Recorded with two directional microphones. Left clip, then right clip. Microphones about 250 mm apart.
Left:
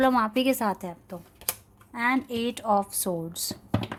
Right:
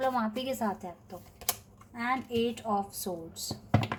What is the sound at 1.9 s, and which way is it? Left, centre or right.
Speech, left.